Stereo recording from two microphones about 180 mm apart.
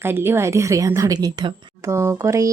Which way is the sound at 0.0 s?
15° right (ahead or behind).